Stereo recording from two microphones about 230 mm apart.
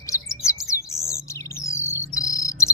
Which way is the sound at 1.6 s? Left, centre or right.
Centre.